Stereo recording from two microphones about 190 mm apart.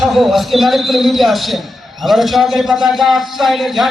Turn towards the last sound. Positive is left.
turn(degrees=0)  # may be behind; listen again after turning